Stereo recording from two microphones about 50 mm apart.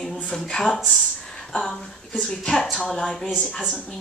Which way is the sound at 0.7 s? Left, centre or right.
Centre.